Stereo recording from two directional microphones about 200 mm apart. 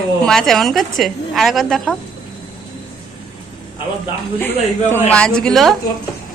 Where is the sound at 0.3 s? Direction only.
Centre (ahead or behind).